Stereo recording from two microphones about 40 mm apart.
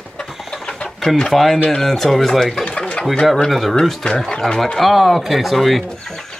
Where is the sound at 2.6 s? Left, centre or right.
Left.